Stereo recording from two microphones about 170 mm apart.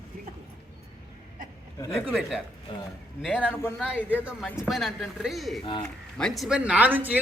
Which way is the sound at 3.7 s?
5° right (ahead or behind).